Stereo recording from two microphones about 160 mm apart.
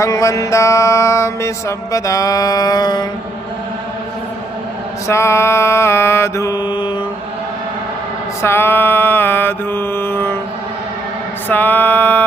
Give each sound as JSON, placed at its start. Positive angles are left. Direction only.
{"t": 0.0, "sound": "mantra", "side_deg": 20}
{"t": 5.0, "sound": "mantra", "side_deg": 15}
{"t": 8.4, "sound": "mantra", "side_deg": 15}
{"t": 11.4, "sound": "mantra", "side_deg": 10}